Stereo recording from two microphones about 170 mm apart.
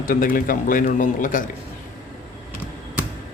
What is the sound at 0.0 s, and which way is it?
A man's voice, 55° left (ahead or behind).